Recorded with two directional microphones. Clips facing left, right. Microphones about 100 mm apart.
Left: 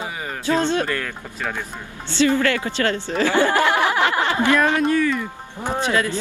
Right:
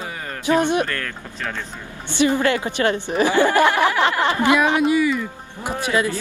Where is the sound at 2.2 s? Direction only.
20° right (ahead or behind).